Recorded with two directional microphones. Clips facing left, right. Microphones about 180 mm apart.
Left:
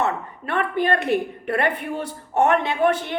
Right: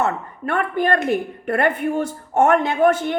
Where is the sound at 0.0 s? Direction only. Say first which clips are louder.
Right 2 dB; 45° right (ahead or behind).